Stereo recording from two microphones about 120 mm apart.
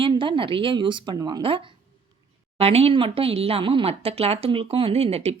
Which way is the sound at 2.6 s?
60° right (ahead or behind).